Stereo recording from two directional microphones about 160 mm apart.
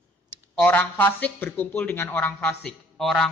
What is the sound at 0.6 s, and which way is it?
A man's voice, 10° left (ahead or behind).